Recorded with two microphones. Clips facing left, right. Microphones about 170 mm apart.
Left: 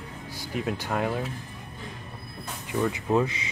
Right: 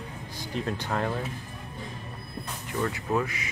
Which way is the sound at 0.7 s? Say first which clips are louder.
Left 2 dB; 10° left (ahead or behind).